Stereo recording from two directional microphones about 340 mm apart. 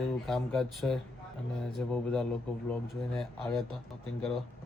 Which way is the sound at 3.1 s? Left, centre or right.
Centre.